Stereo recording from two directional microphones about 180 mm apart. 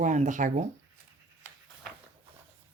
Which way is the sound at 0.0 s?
45° right (ahead or behind).